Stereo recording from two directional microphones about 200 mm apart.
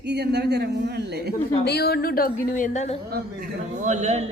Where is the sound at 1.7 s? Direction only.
55° left (ahead or behind); by 2.9 s 35° left (ahead or behind).